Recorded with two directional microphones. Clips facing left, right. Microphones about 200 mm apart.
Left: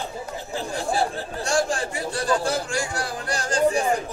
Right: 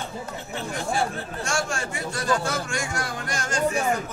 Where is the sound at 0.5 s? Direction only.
35° left (ahead or behind).